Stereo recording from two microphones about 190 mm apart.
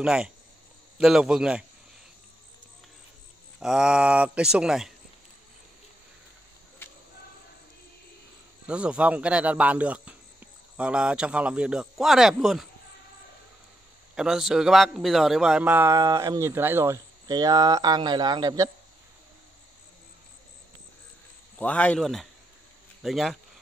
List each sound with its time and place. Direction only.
0.0 s speech: 5° right (ahead or behind)
3.5 s speech: 5° right (ahead or behind)
8.6 s speech: 5° right (ahead or behind)
14.1 s a man's voice: 5° right (ahead or behind); by 18.7 s 20° right (ahead or behind)
21.5 s speech: 5° left (ahead or behind)